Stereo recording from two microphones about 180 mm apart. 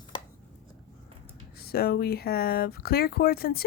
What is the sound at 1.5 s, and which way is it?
A woman's voice, 60° left (ahead or behind).